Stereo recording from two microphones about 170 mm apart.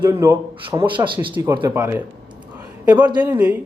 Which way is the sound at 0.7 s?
30° right (ahead or behind).